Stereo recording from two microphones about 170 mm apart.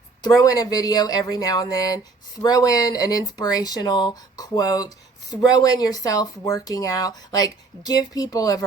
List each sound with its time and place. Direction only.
0.2 s speech: 20° left (ahead or behind)